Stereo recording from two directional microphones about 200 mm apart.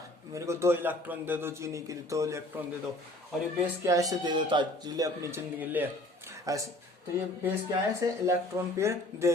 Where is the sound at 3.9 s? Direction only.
15° right (ahead or behind).